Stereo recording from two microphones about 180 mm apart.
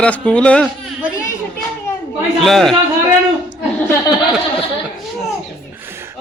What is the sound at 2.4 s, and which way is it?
Speech, centre (ahead or behind).